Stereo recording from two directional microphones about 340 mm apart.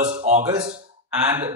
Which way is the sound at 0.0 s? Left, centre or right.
Centre.